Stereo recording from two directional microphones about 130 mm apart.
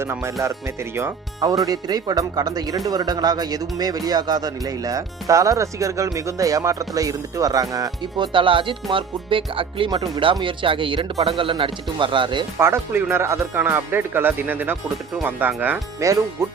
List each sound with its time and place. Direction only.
0.0 s speech: 20° right (ahead or behind)
8.3 s speech: 40° right (ahead or behind)
12.5 s speech: 20° right (ahead or behind)